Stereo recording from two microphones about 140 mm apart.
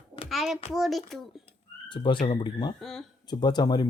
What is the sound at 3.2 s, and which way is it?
Speech, 30° left (ahead or behind).